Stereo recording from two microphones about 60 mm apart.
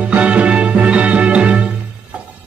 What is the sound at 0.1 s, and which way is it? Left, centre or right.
Music, right.